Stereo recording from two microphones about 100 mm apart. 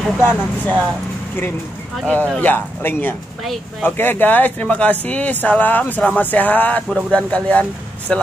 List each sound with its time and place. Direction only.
0.2 s speech: 20° left (ahead or behind)
2.0 s speech: 15° left (ahead or behind)